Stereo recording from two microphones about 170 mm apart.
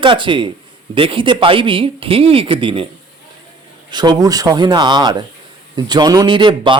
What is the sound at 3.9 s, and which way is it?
A man's voice, 25° right (ahead or behind).